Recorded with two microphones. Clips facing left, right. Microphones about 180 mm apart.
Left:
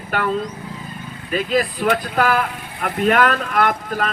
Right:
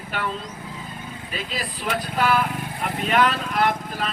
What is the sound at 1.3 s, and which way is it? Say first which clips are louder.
Speech: left 13 dB; 50° left (ahead or behind).